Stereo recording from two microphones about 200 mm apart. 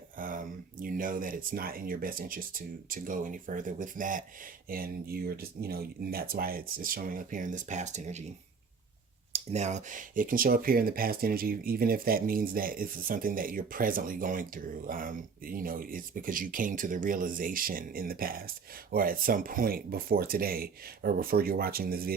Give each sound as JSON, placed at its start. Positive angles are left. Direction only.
{"t": 0.2, "sound": "speech", "side_deg": -40}
{"t": 9.3, "sound": "speech", "side_deg": -35}